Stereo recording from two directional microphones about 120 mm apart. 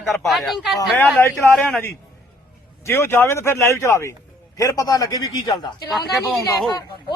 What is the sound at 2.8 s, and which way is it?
A woman's voice, 20° left (ahead or behind).